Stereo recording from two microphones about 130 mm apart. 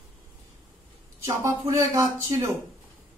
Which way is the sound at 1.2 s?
25° right (ahead or behind).